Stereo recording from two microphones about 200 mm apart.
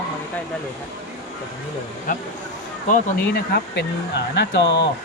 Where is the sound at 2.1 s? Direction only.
40° left (ahead or behind).